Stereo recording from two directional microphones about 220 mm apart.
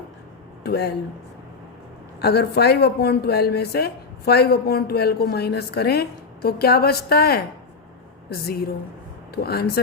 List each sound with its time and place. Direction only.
0.6 s speech: 45° left (ahead or behind)
2.2 s a woman's voice: 45° left (ahead or behind)